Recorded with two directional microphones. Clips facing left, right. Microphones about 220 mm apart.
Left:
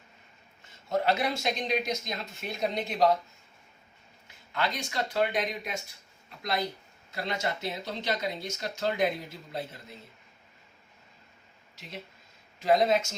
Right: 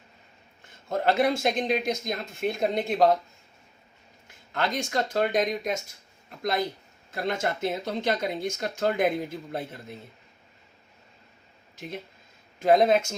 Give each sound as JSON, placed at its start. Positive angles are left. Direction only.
{"t": 0.9, "sound": "speech", "side_deg": -50}
{"t": 4.5, "sound": "speech", "side_deg": -45}
{"t": 7.1, "sound": "speech", "side_deg": -50}
{"t": 12.5, "sound": "speech", "side_deg": -50}